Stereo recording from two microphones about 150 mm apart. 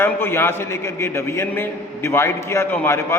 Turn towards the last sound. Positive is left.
turn(degrees=15)  # may be behind; listen again after turning